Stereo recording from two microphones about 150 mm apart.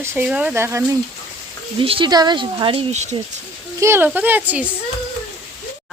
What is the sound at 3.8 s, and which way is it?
Speech, 15° right (ahead or behind).